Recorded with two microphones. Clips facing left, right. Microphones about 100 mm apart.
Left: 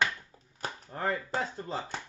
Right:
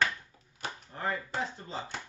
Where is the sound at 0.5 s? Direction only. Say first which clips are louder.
Left 3 dB; 40° left (ahead or behind).